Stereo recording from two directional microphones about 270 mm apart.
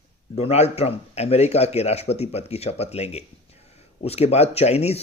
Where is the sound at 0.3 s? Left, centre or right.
Left.